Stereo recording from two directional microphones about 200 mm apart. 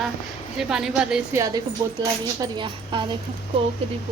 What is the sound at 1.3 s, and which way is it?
A woman's voice, 15° right (ahead or behind).